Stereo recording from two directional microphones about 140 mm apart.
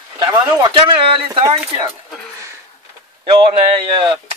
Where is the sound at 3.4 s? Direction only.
45° right (ahead or behind).